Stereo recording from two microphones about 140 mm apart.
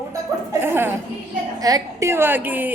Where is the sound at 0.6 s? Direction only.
15° right (ahead or behind).